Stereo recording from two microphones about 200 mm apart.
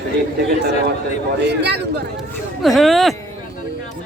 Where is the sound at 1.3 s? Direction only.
55° right (ahead or behind).